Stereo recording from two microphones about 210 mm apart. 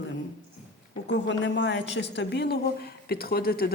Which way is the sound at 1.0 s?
55° left (ahead or behind).